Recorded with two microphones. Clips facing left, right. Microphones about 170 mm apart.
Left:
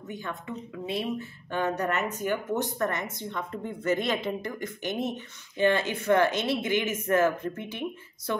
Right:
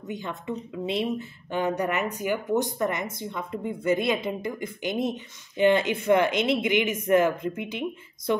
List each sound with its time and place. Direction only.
0.1 s a woman's voice: 20° right (ahead or behind)